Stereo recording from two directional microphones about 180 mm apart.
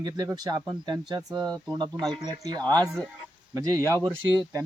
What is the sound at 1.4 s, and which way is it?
Speech, 5° left (ahead or behind).